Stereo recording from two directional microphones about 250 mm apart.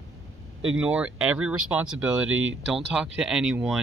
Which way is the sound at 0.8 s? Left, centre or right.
Centre.